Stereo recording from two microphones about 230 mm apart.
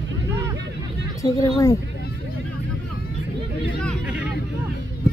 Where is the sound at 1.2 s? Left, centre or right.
Centre.